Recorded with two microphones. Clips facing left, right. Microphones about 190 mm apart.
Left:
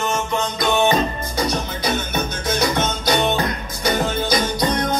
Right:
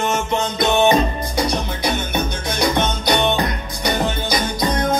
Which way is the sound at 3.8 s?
10° right (ahead or behind).